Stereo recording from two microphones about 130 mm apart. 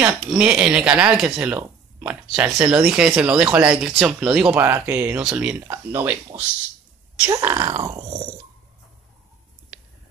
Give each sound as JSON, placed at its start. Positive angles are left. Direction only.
{"t": 0.0, "sound": "speech", "side_deg": -10}
{"t": 5.7, "sound": "speech", "side_deg": -20}
{"t": 7.8, "sound": "a sound", "side_deg": -30}